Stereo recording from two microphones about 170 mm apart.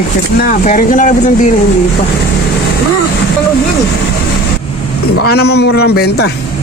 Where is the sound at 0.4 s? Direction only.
55° left (ahead or behind).